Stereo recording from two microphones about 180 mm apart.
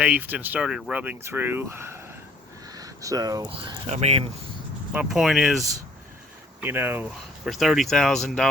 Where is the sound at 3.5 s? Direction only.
30° right (ahead or behind).